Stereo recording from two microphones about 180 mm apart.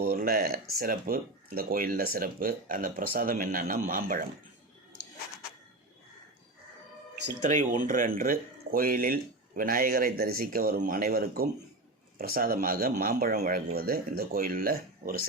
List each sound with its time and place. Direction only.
0.0 s speech: 55° right (ahead or behind)
7.4 s speech: 45° right (ahead or behind)